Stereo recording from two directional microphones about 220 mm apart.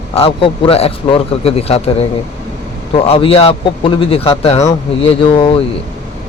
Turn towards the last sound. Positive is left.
turn(degrees=25)  # may be behind; listen again after turning